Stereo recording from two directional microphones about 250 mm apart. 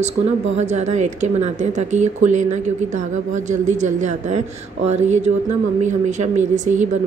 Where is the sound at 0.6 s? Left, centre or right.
Right.